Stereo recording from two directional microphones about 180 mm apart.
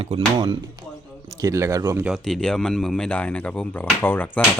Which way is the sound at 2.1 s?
Centre (ahead or behind).